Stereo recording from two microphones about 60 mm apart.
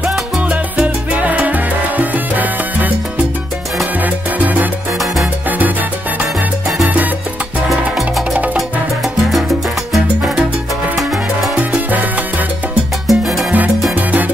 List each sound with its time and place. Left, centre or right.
0.5 s salsa music: right
4.0 s music: right
11.5 s salsa music: right
13.0 s salsa music: centre